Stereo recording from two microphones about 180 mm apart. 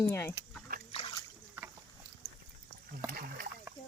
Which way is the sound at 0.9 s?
30° left (ahead or behind).